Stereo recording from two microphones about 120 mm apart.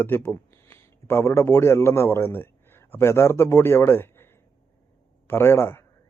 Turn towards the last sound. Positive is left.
turn(degrees=20)  # may be behind; listen again after turning